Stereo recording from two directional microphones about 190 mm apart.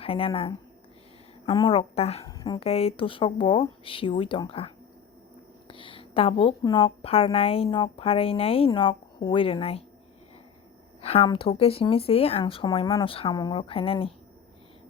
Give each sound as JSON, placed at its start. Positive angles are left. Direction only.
{"t": 0.0, "sound": "a woman's voice", "side_deg": 30}
{"t": 2.2, "sound": "a woman's voice", "side_deg": 20}
{"t": 11.0, "sound": "a woman's voice", "side_deg": 30}